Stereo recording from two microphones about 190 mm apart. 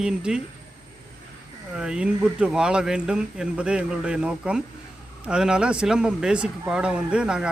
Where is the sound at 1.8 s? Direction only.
5° right (ahead or behind).